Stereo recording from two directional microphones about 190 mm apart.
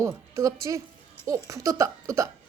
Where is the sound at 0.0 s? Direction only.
15° right (ahead or behind).